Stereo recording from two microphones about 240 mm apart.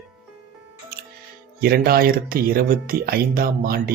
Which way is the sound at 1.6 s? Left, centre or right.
Right.